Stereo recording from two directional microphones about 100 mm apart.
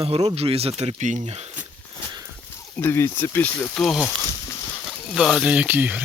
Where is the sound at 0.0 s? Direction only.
75° right (ahead or behind).